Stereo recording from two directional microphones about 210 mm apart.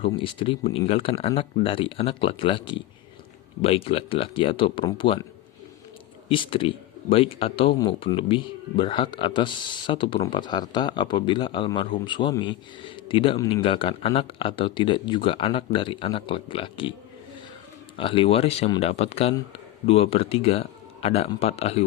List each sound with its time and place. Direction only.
0.1 s speech: 25° left (ahead or behind)
6.2 s speech: 25° left (ahead or behind)
17.9 s speech: 25° left (ahead or behind)